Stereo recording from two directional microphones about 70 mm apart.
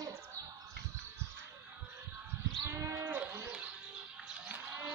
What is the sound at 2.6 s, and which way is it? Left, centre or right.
Goat, right.